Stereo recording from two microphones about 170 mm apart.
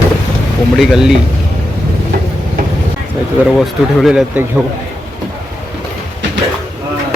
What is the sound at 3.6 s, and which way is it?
Speech, 5° right (ahead or behind).